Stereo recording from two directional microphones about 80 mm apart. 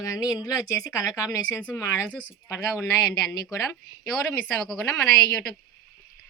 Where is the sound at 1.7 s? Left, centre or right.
Left.